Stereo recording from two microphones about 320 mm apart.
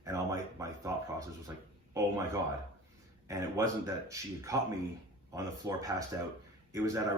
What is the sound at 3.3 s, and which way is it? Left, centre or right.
Speech, centre.